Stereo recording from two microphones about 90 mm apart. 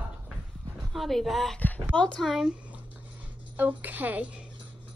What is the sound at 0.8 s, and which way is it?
A woman's voice, centre (ahead or behind).